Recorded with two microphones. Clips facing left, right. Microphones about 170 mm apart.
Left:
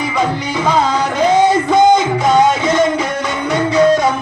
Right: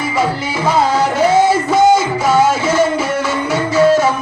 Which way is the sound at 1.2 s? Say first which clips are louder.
Left 1 dB; 10° right (ahead or behind).